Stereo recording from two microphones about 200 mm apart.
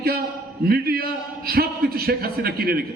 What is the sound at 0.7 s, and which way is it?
A man's voice, 50° right (ahead or behind).